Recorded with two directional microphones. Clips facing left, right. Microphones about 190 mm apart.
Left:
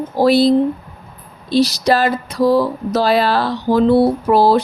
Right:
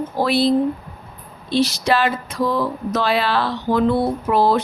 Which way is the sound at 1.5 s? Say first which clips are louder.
Left 4 dB; 35° left (ahead or behind).